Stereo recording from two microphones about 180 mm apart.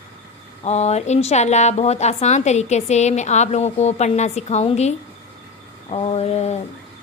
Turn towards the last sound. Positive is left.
turn(degrees=35)  # may be behind; listen again after turning